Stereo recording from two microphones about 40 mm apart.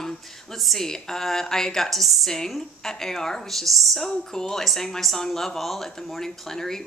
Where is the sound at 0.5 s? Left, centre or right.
Centre.